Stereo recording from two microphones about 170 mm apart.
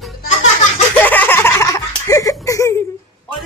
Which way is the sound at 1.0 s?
10° left (ahead or behind).